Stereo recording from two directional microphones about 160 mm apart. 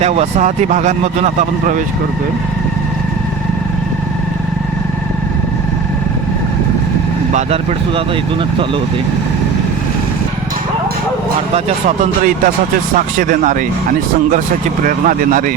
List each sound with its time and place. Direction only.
0.0 s speech: 40° right (ahead or behind)
7.3 s speech: 40° right (ahead or behind)
13.1 s speech: 55° right (ahead or behind)
14.8 s speech: 55° right (ahead or behind)